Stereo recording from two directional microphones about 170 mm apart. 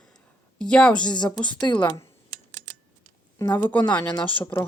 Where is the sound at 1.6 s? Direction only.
30° left (ahead or behind).